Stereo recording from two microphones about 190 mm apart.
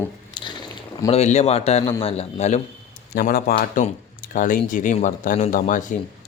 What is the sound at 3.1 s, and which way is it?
A man's voice, 50° left (ahead or behind).